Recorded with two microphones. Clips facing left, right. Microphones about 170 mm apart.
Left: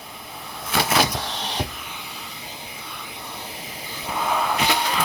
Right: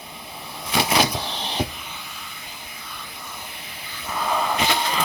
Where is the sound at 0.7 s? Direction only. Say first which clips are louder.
Even; 10° right (ahead or behind).